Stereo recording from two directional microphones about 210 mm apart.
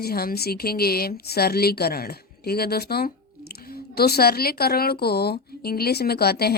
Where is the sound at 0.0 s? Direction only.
45° left (ahead or behind).